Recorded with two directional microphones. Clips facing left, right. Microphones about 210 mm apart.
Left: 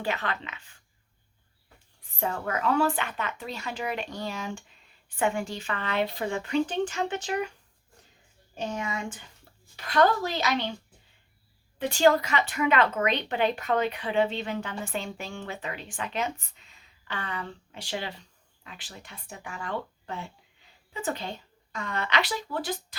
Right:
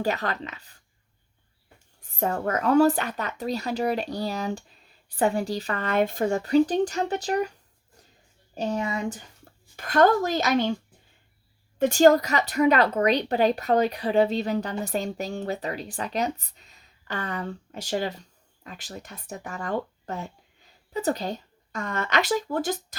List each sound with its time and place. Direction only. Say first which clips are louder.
0.0 s a woman's voice: right 4 dB; 40° right (ahead or behind)
2.0 s a woman's voice: right 5 dB; 45° right (ahead or behind)
8.5 s speech: right 5 dB; 35° right (ahead or behind)
11.8 s a woman's voice: right 5 dB; 45° right (ahead or behind)